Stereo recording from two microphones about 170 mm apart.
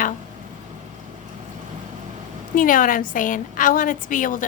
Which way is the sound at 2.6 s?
55° left (ahead or behind).